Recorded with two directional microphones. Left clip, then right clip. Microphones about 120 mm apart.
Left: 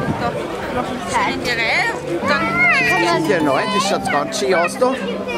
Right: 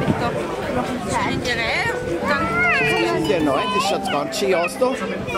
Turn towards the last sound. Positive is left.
turn(degrees=5)  # may be behind; listen again after turning